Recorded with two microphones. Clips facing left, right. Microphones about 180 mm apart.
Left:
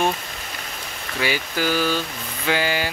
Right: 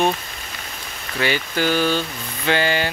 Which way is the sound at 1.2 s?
5° left (ahead or behind).